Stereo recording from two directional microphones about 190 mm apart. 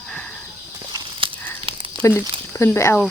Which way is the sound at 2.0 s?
15° left (ahead or behind).